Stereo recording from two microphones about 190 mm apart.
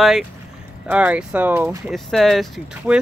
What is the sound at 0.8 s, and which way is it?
Speech, 10° right (ahead or behind).